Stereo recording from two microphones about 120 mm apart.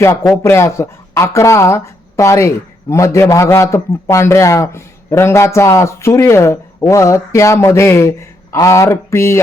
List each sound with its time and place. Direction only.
0.3 s speech: 20° left (ahead or behind)